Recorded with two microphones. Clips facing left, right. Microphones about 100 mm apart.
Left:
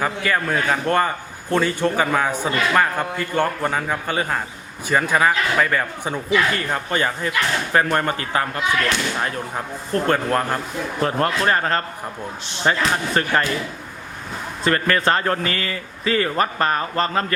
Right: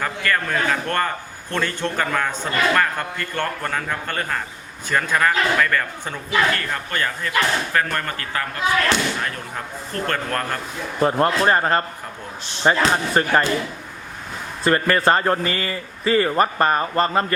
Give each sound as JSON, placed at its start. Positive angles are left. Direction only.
{"t": 0.0, "sound": "a man's voice", "side_deg": 10}
{"t": 9.9, "sound": "a man's voice", "side_deg": 10}
{"t": 11.0, "sound": "a man's voice", "side_deg": -20}
{"t": 14.6, "sound": "a man's voice", "side_deg": -20}
{"t": 16.3, "sound": "a man's voice", "side_deg": -10}